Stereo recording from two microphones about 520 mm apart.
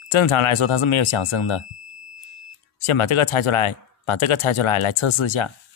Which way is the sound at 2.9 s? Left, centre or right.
Left.